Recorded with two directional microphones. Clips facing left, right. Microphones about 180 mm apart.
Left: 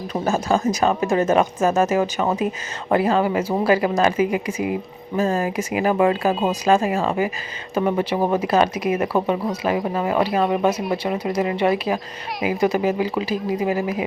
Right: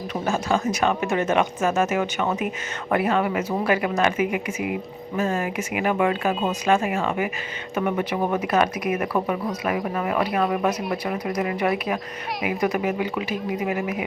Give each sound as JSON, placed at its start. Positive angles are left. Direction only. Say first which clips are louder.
{"t": 0.1, "sound": "speech", "louder": "left 3 dB", "side_deg": 35}